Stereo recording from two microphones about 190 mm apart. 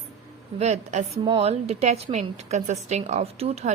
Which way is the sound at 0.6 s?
35° right (ahead or behind).